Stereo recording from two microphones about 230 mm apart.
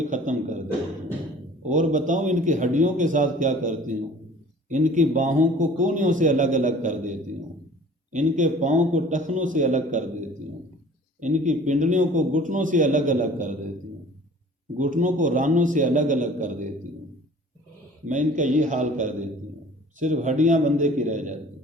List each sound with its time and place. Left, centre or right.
0.0 s a sound: right
1.6 s a man's voice: right
14.8 s a man's voice: right
18.1 s a man's voice: right